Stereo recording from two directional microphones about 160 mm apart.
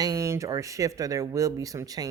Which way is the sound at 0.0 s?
20° right (ahead or behind).